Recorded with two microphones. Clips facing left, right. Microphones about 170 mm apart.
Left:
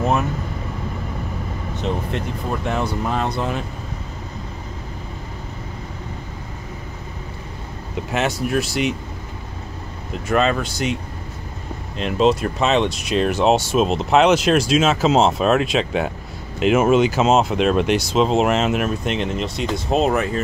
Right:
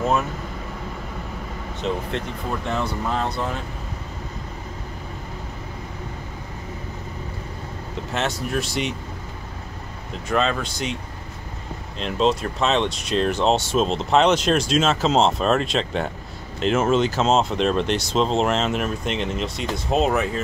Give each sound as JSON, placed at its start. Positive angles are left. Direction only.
{"t": 2.8, "sound": "speech", "side_deg": 15}
{"t": 8.1, "sound": "speech", "side_deg": 10}
{"t": 10.2, "sound": "speech", "side_deg": 5}
{"t": 12.0, "sound": "speech", "side_deg": 5}